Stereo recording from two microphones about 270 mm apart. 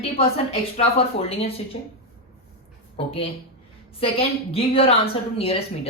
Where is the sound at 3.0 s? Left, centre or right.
Left.